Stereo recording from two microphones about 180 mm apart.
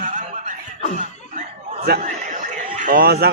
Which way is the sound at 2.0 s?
45° right (ahead or behind).